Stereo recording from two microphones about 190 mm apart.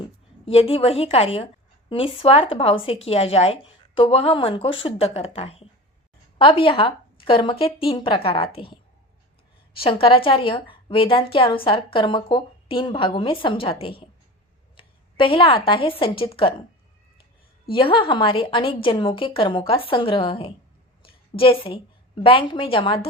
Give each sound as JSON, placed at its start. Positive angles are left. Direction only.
{"t": 0.0, "sound": "a woman's voice", "side_deg": 30}
{"t": 9.8, "sound": "a woman's voice", "side_deg": 30}
{"t": 17.7, "sound": "a woman's voice", "side_deg": 25}